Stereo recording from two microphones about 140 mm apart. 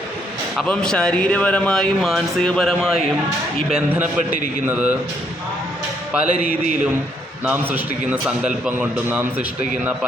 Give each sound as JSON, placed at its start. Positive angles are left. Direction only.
{"t": 0.5, "sound": "a man's voice", "side_deg": 5}
{"t": 6.1, "sound": "a man's voice", "side_deg": -10}
{"t": 7.4, "sound": "a man's voice", "side_deg": -15}